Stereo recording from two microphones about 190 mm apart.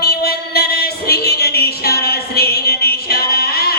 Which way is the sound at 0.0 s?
55° left (ahead or behind).